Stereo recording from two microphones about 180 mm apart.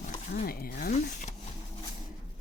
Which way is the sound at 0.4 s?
55° left (ahead or behind).